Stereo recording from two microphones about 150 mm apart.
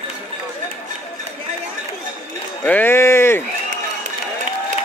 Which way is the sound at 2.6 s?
10° left (ahead or behind).